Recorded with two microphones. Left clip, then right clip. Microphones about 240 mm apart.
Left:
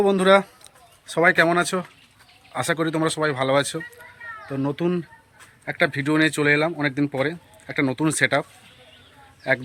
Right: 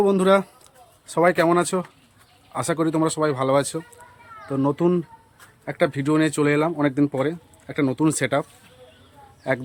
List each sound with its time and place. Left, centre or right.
0.0 s speech: centre
9.5 s speech: centre